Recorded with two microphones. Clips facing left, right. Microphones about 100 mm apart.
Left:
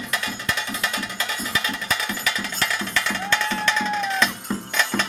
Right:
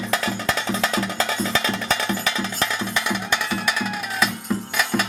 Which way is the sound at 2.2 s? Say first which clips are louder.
Right 2 dB; 20° right (ahead or behind).